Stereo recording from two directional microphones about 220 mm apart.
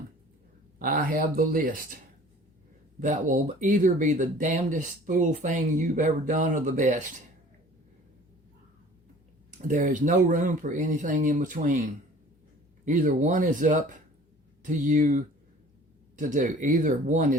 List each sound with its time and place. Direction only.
0.8 s speech: 40° right (ahead or behind)
3.0 s speech: 35° right (ahead or behind)
9.6 s speech: 35° right (ahead or behind)